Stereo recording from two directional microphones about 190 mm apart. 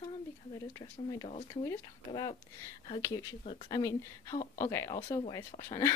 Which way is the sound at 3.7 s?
20° left (ahead or behind).